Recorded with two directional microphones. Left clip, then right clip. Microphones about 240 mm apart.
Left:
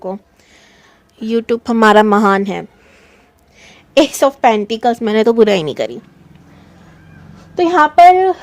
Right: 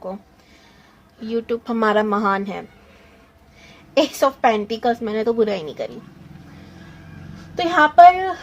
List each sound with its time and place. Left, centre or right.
1.2 s speech: left
3.9 s speech: left
7.5 s a woman's voice: left